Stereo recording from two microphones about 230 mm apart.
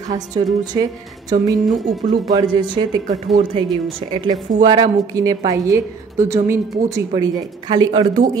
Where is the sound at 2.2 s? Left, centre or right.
Centre.